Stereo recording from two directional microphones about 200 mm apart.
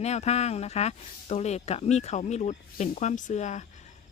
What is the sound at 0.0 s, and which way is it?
Speech, 35° left (ahead or behind).